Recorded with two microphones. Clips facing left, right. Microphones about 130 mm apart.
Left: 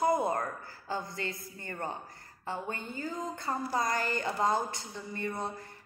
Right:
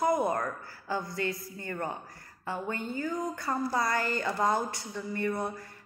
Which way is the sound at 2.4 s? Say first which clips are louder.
Right 3 dB; 20° left (ahead or behind).